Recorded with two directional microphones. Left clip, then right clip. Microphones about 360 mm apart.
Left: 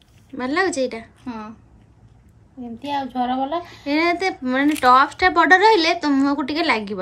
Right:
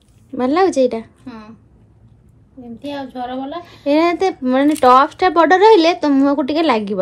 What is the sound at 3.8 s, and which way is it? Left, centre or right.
Speech, centre.